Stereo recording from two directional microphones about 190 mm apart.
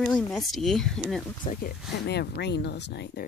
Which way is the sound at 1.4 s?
45° left (ahead or behind).